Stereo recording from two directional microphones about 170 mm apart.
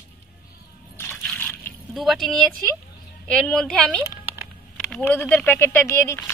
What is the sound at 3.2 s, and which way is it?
A woman's voice, 5° left (ahead or behind).